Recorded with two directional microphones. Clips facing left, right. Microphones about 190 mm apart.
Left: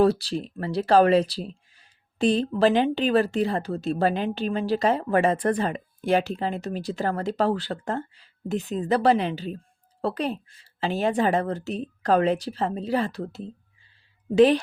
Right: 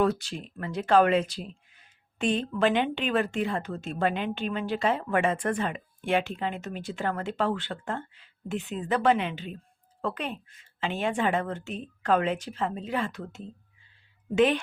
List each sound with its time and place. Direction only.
0.0 s speech: 35° left (ahead or behind)